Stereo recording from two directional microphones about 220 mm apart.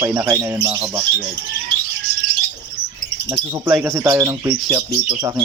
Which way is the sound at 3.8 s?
15° right (ahead or behind).